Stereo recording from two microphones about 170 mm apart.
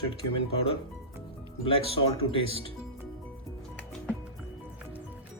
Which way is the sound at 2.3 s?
30° left (ahead or behind).